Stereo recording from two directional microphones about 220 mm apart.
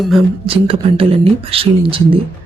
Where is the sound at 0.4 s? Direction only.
25° right (ahead or behind).